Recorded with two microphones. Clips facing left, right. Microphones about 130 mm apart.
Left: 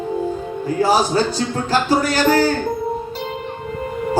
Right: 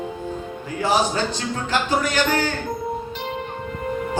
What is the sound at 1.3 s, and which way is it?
Speech, 35° left (ahead or behind).